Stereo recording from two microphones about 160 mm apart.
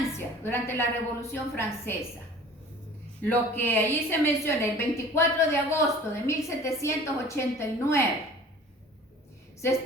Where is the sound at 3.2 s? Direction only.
15° left (ahead or behind).